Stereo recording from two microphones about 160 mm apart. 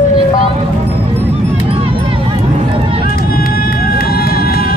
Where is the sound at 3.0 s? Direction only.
65° left (ahead or behind).